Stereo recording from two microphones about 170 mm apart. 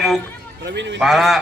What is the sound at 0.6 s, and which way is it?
Speech, 90° right.